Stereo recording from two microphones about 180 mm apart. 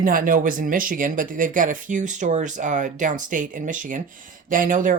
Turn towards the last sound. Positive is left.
turn(degrees=-50)  # may be behind; listen again after turning